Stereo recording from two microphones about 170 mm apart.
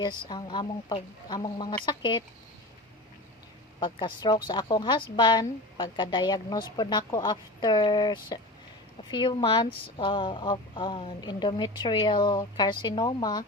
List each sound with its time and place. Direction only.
0.0 s a woman's voice: 25° left (ahead or behind)
3.8 s a woman's voice: 25° left (ahead or behind)